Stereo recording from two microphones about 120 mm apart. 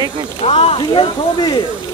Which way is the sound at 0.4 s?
55° left (ahead or behind).